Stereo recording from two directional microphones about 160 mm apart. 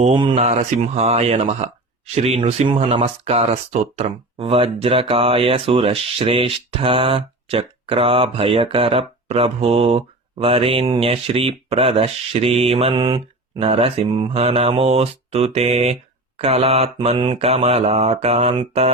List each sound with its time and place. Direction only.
0.0 s speech: 30° right (ahead or behind)
0.4 s speech: 40° right (ahead or behind)